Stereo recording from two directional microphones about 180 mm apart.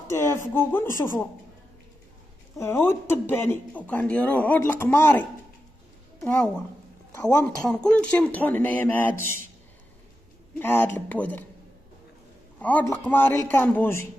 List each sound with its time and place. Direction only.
0.1 s speech: 15° left (ahead or behind)
2.6 s speech: 15° left (ahead or behind)
6.2 s speech: 10° left (ahead or behind)
10.6 s speech: 10° left (ahead or behind)
12.5 s a sound: 10° left (ahead or behind)
12.9 s speech: 10° left (ahead or behind)